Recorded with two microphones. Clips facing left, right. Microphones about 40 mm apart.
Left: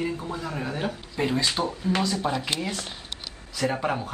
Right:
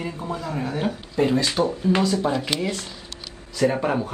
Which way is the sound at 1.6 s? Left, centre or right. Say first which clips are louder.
Right 5 dB; right.